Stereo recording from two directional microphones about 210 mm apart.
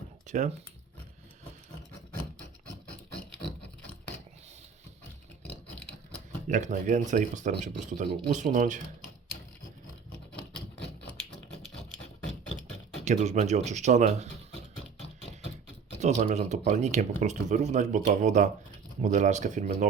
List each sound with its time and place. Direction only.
0.3 s speech: 35° right (ahead or behind)
6.5 s speech: 35° right (ahead or behind)
11.2 s music: 5° left (ahead or behind)
13.0 s speech: 35° right (ahead or behind)
16.0 s speech: 35° right (ahead or behind)